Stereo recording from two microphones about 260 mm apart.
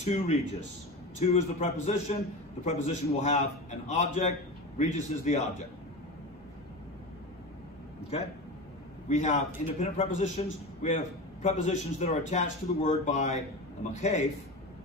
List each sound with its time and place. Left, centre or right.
0.0 s speech: left
9.1 s speech: left